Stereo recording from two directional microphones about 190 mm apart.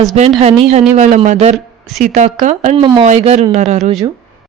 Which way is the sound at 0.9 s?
40° right (ahead or behind).